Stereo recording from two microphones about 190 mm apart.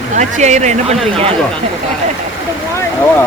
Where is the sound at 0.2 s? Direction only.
40° right (ahead or behind).